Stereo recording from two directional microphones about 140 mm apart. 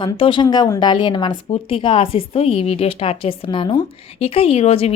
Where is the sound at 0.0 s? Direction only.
35° left (ahead or behind).